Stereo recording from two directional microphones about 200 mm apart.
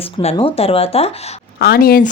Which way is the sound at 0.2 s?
30° left (ahead or behind).